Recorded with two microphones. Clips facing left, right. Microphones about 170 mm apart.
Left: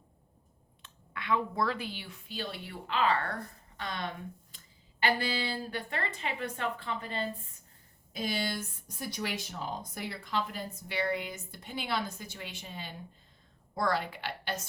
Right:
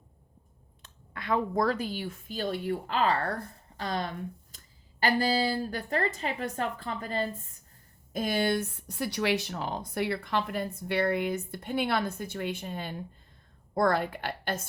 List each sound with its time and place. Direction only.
0.8 s a woman's voice: 40° right (ahead or behind)